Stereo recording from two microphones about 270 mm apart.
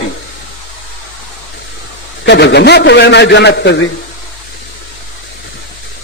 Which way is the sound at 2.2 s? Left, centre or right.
Left.